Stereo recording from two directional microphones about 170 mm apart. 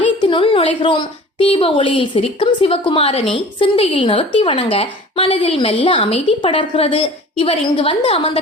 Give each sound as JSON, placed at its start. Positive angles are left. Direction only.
{"t": 0.0, "sound": "a woman's voice", "side_deg": 30}